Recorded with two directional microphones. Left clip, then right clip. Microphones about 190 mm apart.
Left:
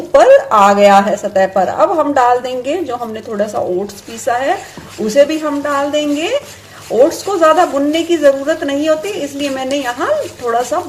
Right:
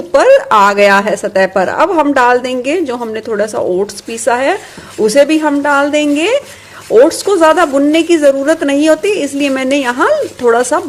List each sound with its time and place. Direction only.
0.1 s a woman's voice: 45° right (ahead or behind)